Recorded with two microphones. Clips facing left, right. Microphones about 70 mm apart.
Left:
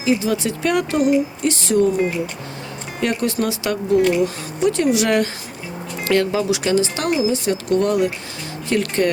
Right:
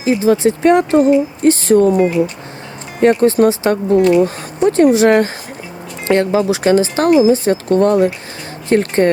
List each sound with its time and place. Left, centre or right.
0.0 s speech: right
3.0 s speech: right